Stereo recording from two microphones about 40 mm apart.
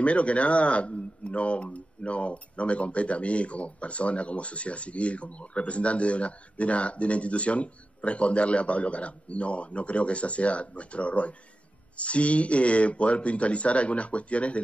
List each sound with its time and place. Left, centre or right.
0.0 s speech: left